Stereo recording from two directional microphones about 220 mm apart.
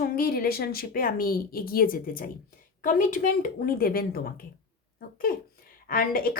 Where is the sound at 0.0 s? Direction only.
40° left (ahead or behind).